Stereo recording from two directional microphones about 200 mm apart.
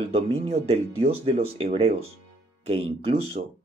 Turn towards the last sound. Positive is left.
turn(degrees=-30)  # may be behind; listen again after turning